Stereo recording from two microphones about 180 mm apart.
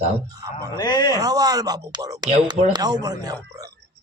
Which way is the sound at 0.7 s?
25° left (ahead or behind).